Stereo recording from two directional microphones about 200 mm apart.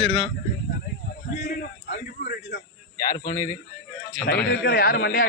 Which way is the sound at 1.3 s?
55° left (ahead or behind).